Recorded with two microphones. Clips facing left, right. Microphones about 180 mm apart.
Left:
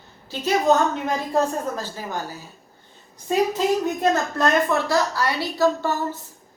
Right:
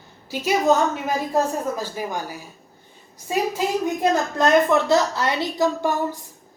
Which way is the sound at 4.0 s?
20° right (ahead or behind).